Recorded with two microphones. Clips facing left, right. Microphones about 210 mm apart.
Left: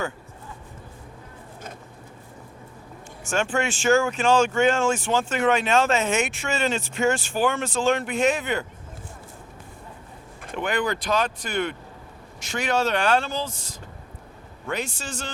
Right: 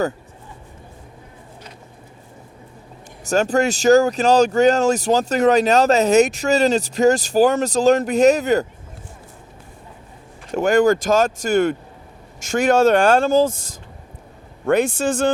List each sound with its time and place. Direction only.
3.2 s speech: 40° right (ahead or behind)
10.5 s speech: 45° right (ahead or behind)